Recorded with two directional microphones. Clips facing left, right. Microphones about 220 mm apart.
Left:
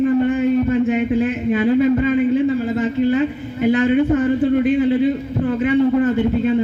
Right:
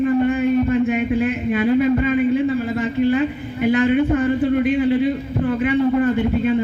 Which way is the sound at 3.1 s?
35° left (ahead or behind).